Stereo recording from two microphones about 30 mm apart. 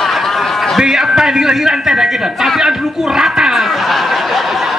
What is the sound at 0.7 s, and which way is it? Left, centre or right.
A man's voice, centre.